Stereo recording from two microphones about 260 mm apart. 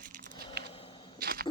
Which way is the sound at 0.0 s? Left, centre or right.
Right.